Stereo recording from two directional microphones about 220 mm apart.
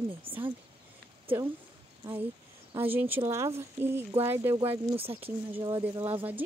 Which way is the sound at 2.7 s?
10° right (ahead or behind).